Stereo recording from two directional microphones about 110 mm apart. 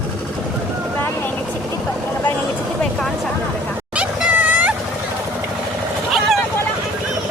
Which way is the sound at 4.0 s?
10° right (ahead or behind).